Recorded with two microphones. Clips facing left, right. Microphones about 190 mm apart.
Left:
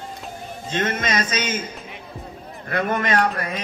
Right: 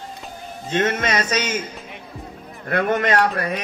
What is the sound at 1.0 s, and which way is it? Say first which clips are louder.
Speech: right 2 dB; 65° right (ahead or behind).